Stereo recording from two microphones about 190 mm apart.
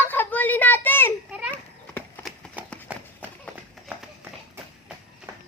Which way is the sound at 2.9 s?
5° right (ahead or behind).